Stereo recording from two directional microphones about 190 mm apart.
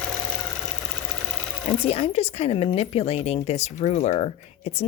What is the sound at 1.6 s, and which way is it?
Speech, 35° left (ahead or behind).